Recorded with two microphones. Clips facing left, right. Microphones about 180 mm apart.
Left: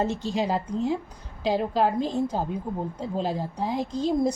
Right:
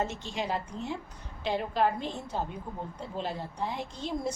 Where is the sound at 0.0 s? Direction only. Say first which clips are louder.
Left 7 dB; 35° left (ahead or behind).